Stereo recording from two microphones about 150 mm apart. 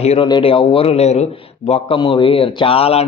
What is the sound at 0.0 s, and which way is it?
A man's voice, 45° left (ahead or behind).